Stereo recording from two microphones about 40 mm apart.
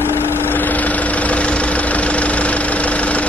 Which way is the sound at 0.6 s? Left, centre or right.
Left.